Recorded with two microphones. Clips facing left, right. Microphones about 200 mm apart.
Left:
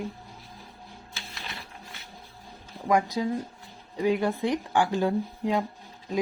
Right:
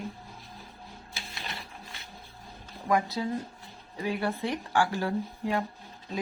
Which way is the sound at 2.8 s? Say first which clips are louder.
Left 3 dB; 15° left (ahead or behind).